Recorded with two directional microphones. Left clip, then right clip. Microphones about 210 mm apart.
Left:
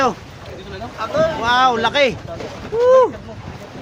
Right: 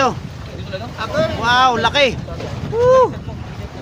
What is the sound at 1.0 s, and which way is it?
Speech, 40° right (ahead or behind).